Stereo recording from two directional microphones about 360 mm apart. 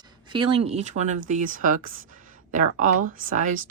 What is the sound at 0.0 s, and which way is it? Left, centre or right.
Speech, centre.